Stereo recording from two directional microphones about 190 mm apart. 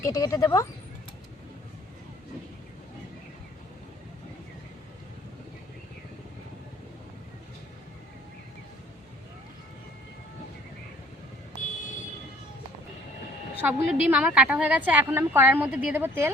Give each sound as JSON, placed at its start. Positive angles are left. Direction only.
{"t": 0.0, "sound": "speech", "side_deg": 15}
{"t": 13.6, "sound": "a woman's voice", "side_deg": -5}